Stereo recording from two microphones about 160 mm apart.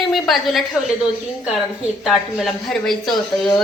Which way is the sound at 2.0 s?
Centre (ahead or behind).